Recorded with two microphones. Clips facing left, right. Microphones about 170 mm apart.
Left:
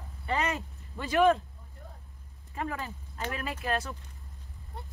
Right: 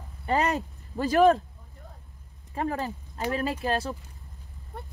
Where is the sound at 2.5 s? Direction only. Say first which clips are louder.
Right 6 dB; 35° right (ahead or behind).